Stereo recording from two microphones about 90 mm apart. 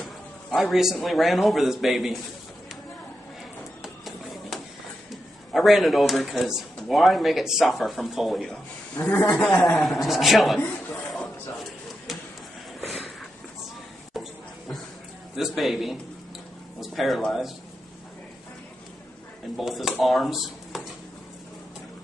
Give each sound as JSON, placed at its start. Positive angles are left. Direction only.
{"t": 0.6, "sound": "speech", "side_deg": 0}
{"t": 3.8, "sound": "music", "side_deg": 0}
{"t": 5.1, "sound": "speech", "side_deg": 0}
{"t": 8.9, "sound": "a man's voice", "side_deg": 20}
{"t": 9.7, "sound": "speech", "side_deg": 0}
{"t": 10.9, "sound": "a sound", "side_deg": 5}
{"t": 12.8, "sound": "a sound", "side_deg": 0}
{"t": 14.2, "sound": "a sound", "side_deg": 0}
{"t": 15.3, "sound": "speech", "side_deg": 0}
{"t": 19.5, "sound": "speech", "side_deg": 0}